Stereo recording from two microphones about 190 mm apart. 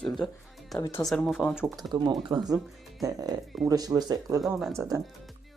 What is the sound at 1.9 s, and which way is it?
Speech, 25° right (ahead or behind).